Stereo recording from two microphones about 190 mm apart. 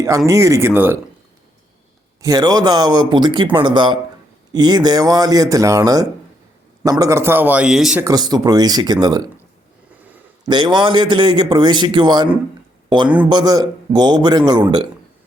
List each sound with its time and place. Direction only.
0.3 s a man's voice: 15° right (ahead or behind)
2.2 s a man's voice: 20° right (ahead or behind); by 8.0 s 5° right (ahead or behind)
8.0 s a man's voice: 20° right (ahead or behind)
10.4 s a man's voice: 25° right (ahead or behind)